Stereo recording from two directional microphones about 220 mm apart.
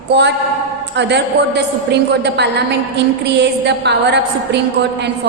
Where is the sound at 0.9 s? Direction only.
50° right (ahead or behind).